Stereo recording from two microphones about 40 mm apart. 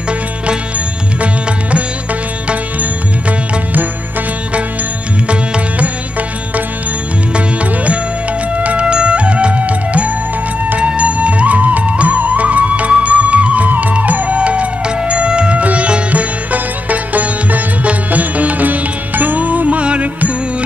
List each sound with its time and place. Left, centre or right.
1.2 s music: right
2.8 s music: right
7.3 s music: right
19.8 s music: right